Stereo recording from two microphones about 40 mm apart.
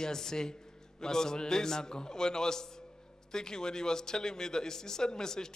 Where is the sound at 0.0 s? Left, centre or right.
Centre.